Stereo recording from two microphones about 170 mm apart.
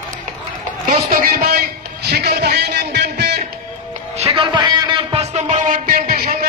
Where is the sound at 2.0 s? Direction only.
70° right (ahead or behind).